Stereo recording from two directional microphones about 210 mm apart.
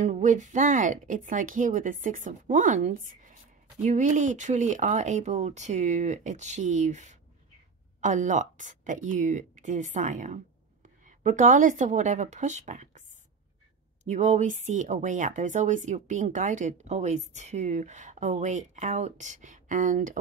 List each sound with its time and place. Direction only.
0.0 s speech: 35° right (ahead or behind)
14.0 s speech: 35° right (ahead or behind)